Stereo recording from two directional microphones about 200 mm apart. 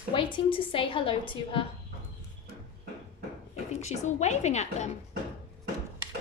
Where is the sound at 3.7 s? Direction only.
35° left (ahead or behind).